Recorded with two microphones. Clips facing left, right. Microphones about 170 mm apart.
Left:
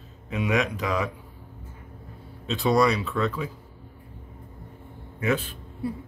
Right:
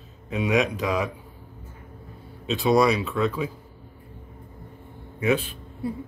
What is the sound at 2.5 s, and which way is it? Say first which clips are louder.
Speech: right 2 dB; 10° right (ahead or behind).